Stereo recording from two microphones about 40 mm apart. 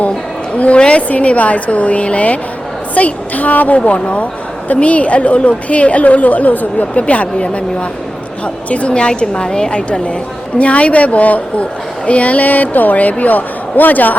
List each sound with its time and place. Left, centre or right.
0.5 s a woman's voice: left
3.8 s a woman's voice: left
10.6 s a woman's voice: left